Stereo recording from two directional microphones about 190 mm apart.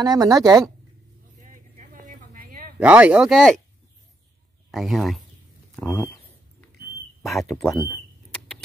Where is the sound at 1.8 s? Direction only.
45° right (ahead or behind).